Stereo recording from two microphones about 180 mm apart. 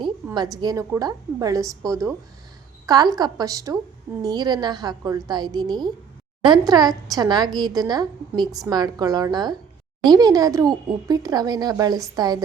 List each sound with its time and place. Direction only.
0.3 s a woman's voice: 20° right (ahead or behind)